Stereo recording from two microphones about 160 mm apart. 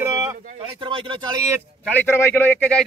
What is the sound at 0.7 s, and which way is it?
Speech, 30° right (ahead or behind).